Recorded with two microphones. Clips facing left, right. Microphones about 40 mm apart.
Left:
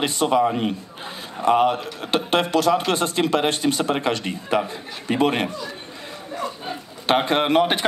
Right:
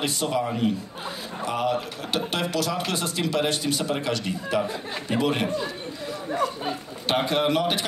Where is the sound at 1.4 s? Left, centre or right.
Left.